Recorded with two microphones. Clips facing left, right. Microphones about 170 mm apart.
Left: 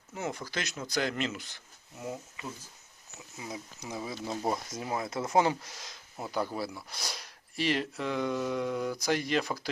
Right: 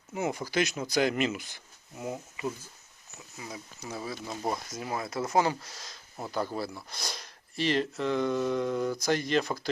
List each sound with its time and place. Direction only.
0.1 s speech: 10° right (ahead or behind)
3.3 s speech: 20° left (ahead or behind)